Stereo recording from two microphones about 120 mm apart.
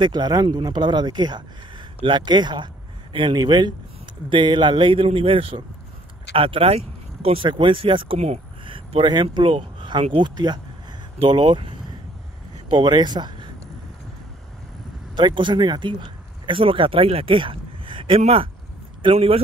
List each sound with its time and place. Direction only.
0.0 s speech: 35° right (ahead or behind)
15.1 s speech: 40° right (ahead or behind)